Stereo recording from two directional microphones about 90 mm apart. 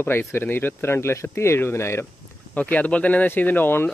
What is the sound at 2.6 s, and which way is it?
Speech, 15° left (ahead or behind).